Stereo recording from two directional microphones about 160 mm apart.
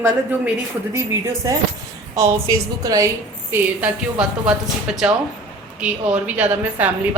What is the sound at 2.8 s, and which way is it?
Speech, 20° right (ahead or behind).